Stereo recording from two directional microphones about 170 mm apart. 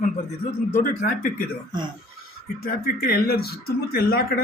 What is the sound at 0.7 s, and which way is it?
Speech, 50° left (ahead or behind).